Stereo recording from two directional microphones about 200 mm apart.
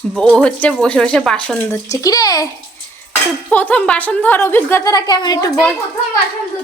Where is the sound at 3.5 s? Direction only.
5° left (ahead or behind).